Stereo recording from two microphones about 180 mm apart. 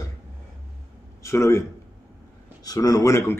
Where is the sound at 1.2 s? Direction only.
15° left (ahead or behind).